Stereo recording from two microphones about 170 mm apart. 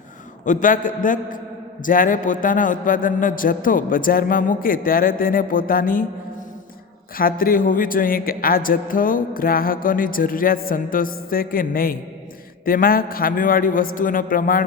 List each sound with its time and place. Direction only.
0.4 s a man's voice: 50° left (ahead or behind)
7.2 s speech: 60° left (ahead or behind)